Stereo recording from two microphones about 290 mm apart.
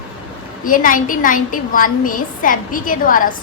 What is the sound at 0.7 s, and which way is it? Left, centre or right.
A woman's voice, left.